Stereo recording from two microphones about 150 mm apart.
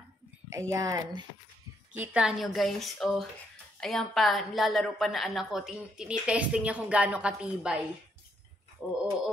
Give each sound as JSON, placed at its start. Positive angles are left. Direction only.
{"t": 0.5, "sound": "a woman's voice", "side_deg": -20}
{"t": 2.0, "sound": "a woman's voice", "side_deg": -5}